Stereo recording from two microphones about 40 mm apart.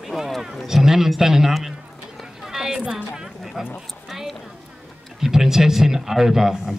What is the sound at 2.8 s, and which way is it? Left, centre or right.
Speech, centre.